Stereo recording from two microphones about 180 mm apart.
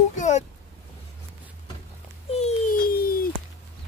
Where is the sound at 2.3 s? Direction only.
30° left (ahead or behind).